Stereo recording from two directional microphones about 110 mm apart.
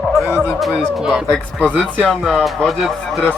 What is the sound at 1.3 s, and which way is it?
A man's voice, 10° left (ahead or behind).